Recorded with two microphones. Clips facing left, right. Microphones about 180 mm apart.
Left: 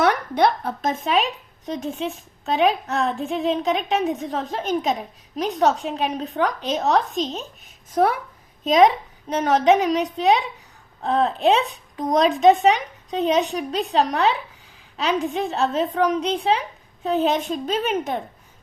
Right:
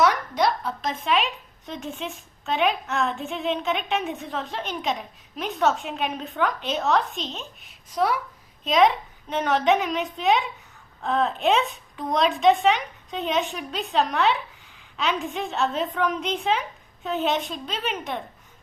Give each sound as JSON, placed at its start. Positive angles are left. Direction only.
{"t": 0.0, "sound": "a woman's voice", "side_deg": 60}